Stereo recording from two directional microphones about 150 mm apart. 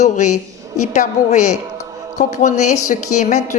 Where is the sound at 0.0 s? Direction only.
50° left (ahead or behind).